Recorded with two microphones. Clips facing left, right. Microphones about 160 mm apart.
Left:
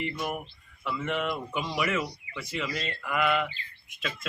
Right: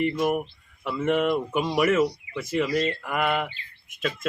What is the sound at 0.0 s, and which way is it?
Speech, 45° right (ahead or behind).